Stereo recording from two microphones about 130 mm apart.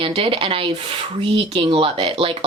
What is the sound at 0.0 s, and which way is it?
Speech, 45° right (ahead or behind).